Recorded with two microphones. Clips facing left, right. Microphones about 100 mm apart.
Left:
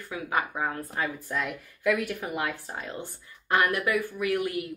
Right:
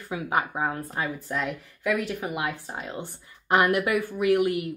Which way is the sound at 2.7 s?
20° right (ahead or behind).